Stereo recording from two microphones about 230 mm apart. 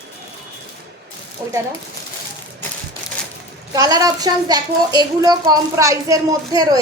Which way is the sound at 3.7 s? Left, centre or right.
Centre.